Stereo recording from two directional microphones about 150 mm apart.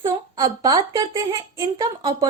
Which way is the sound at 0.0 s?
25° right (ahead or behind).